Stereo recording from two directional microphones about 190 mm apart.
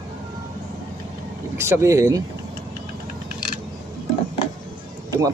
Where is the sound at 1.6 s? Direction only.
15° right (ahead or behind).